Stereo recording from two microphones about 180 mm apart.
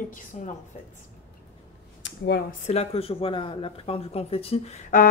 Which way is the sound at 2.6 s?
35° left (ahead or behind).